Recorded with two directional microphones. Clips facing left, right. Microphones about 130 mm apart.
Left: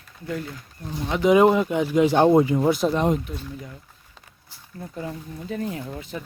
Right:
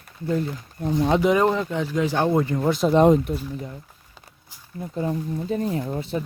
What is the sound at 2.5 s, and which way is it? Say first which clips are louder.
Speech: left 1 dB; 5° left (ahead or behind).